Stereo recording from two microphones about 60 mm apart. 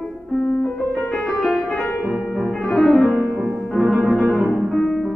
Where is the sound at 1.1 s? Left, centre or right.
Centre.